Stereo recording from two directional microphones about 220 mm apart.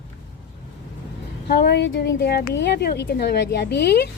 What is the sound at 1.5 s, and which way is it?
Speech, 50° left (ahead or behind).